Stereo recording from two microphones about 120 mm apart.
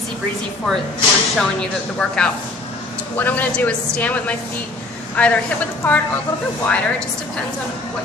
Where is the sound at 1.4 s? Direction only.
5° left (ahead or behind).